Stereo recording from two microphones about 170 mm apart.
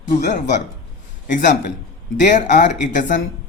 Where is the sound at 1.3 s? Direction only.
50° left (ahead or behind).